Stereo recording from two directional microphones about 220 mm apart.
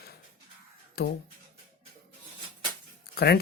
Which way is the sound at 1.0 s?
45° left (ahead or behind).